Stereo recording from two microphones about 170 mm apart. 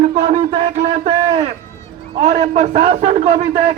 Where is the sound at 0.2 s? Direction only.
40° right (ahead or behind).